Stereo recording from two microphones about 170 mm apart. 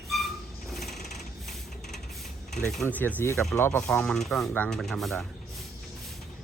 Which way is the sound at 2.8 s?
10° left (ahead or behind).